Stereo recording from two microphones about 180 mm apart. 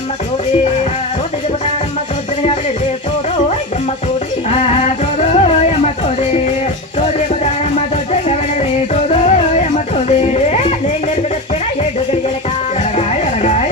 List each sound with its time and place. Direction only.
4.4 s music: 35° left (ahead or behind)
8.9 s music: 40° left (ahead or behind)
13.0 s music: 40° left (ahead or behind)